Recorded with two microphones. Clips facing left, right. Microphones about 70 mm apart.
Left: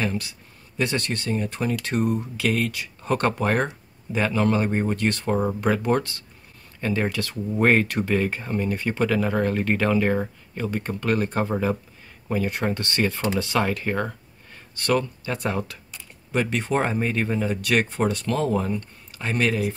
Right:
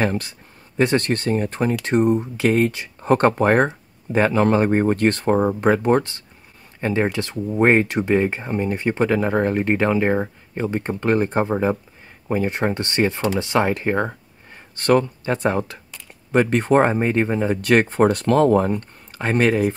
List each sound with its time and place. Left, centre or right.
0.0 s speech: right
1.8 s speech: right
18.0 s speech: right